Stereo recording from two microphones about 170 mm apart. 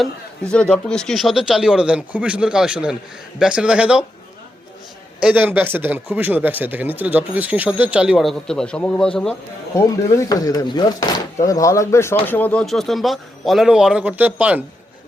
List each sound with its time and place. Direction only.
0.0 s a man's voice: 5° left (ahead or behind)
5.2 s speech: 10° right (ahead or behind)
9.7 s a man's voice: 20° left (ahead or behind); by 14.6 s 10° right (ahead or behind)